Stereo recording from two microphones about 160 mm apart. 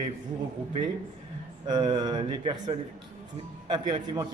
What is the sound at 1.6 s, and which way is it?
A man's voice, 25° right (ahead or behind).